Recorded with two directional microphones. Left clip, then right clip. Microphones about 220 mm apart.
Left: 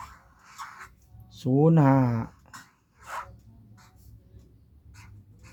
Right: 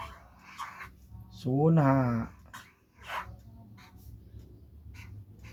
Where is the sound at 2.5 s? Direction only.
50° left (ahead or behind).